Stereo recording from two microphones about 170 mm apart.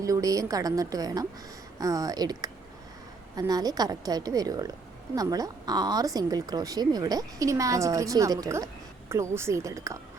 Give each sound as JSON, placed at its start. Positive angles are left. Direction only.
{"t": 0.0, "sound": "speech", "side_deg": -20}